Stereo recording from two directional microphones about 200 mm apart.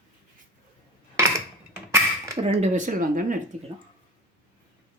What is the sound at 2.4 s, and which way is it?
Speech, 30° right (ahead or behind).